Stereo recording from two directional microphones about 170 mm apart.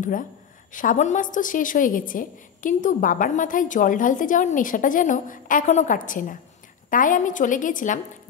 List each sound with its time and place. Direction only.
0.7 s a woman's voice: 50° left (ahead or behind)